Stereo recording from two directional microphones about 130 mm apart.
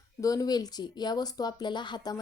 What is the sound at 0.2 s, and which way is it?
A woman's voice, 30° left (ahead or behind).